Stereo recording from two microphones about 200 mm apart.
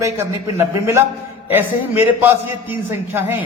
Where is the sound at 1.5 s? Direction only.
10° right (ahead or behind).